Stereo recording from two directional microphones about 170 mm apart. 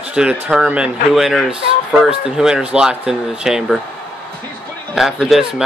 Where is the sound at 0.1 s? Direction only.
5° right (ahead or behind).